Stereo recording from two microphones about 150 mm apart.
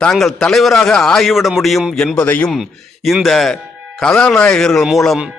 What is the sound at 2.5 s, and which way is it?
Speech, 5° right (ahead or behind).